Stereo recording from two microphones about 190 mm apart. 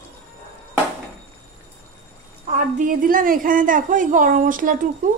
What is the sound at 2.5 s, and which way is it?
A woman's voice, 40° right (ahead or behind).